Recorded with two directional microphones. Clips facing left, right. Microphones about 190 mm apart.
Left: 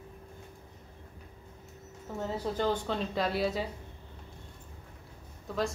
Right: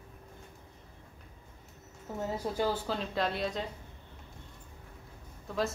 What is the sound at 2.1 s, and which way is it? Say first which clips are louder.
A woman's voice: left 1 dB; 15° right (ahead or behind).